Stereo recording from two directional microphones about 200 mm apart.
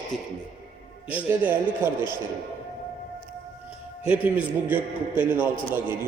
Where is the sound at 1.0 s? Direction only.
5° right (ahead or behind).